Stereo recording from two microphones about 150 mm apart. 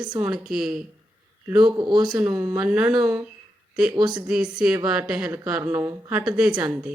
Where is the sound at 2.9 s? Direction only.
20° right (ahead or behind).